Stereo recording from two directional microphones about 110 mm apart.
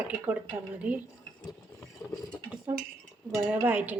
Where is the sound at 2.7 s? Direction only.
15° right (ahead or behind).